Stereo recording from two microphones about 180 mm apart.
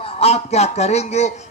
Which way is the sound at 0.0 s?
35° left (ahead or behind).